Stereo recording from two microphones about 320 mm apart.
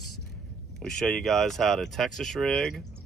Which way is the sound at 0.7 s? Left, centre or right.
Centre.